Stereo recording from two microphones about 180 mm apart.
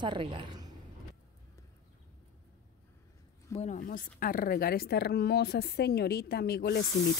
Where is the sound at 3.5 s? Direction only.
40° left (ahead or behind); by 6.8 s 65° left (ahead or behind).